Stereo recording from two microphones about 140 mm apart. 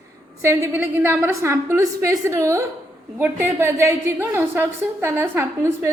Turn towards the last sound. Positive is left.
turn(degrees=-15)  # may be behind; listen again after turning